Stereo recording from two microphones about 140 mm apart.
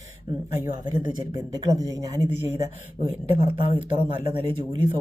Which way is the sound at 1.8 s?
25° right (ahead or behind).